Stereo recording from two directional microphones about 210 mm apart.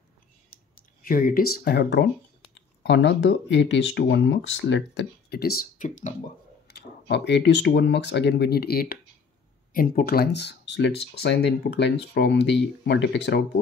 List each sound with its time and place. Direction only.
1.0 s speech: 40° left (ahead or behind)
6.7 s speech: 55° left (ahead or behind)